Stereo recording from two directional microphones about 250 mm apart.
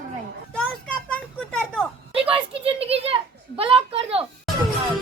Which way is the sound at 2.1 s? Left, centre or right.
Right.